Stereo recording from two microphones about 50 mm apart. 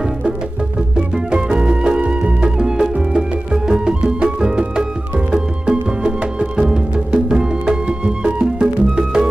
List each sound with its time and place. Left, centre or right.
0.9 s music: centre